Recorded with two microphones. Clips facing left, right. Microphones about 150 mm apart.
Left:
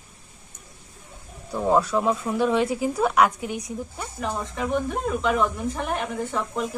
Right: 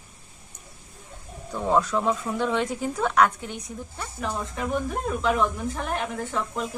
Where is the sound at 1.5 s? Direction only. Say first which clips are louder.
Left 2 dB; 10° left (ahead or behind).